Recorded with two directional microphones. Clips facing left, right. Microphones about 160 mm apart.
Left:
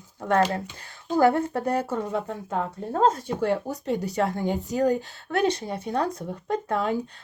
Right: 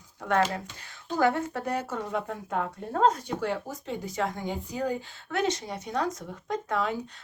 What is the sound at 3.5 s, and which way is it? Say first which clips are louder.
Speech: left 7 dB; 65° left (ahead or behind).